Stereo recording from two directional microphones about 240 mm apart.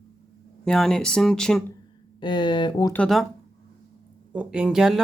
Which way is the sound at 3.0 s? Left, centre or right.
Centre.